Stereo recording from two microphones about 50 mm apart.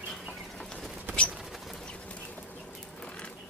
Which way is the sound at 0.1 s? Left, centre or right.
Centre.